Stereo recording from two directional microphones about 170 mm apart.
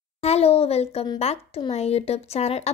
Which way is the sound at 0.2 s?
35° left (ahead or behind).